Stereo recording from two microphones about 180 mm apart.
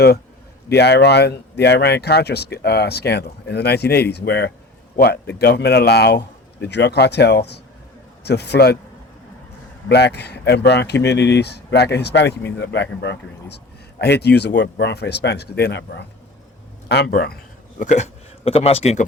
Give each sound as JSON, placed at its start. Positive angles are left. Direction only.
{"t": 0.7, "sound": "speech", "side_deg": 65}
{"t": 9.9, "sound": "speech", "side_deg": 70}
{"t": 17.7, "sound": "speech", "side_deg": 40}